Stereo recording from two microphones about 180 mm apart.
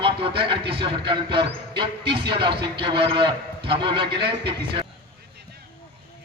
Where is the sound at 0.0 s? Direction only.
30° right (ahead or behind).